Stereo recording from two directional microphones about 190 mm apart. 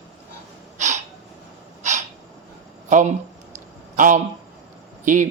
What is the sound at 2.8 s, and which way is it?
Speech, 40° right (ahead or behind).